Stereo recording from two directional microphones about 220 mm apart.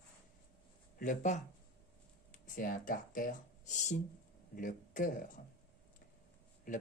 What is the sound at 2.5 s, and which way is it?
Speech, 40° left (ahead or behind).